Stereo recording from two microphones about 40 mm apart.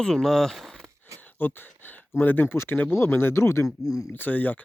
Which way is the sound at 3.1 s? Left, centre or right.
Left.